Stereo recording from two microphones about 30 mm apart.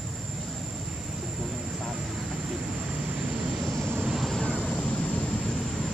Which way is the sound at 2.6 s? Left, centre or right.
Right.